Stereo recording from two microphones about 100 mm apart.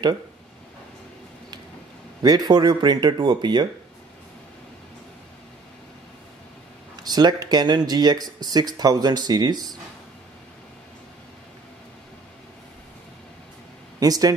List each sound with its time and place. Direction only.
2.2 s speech: 45° right (ahead or behind)
7.0 s speech: 40° right (ahead or behind)
13.9 s speech: 40° right (ahead or behind)